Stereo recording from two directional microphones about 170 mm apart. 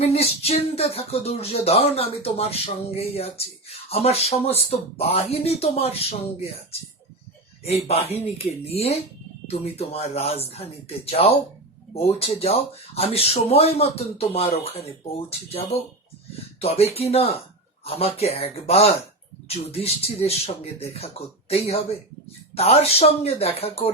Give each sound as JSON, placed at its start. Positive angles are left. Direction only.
{"t": 0.0, "sound": "speech", "side_deg": 35}